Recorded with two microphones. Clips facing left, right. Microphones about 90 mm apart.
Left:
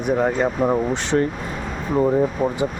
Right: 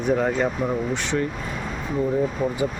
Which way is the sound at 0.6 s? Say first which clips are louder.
Left 5 dB; 45° left (ahead or behind).